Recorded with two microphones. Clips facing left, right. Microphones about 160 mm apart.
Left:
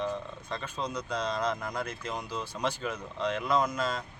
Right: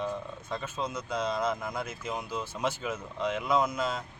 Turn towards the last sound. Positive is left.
turn(degrees=-10)  # may be behind; listen again after turning